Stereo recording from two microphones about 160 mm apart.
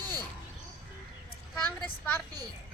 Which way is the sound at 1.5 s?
10° left (ahead or behind).